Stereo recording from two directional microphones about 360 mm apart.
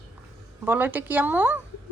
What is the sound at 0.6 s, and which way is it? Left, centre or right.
Speech, centre.